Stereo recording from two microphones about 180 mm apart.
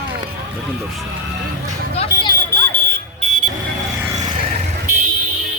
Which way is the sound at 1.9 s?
30° left (ahead or behind).